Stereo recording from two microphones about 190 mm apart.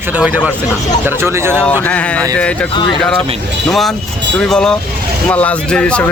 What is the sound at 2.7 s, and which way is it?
Speech, 25° left (ahead or behind).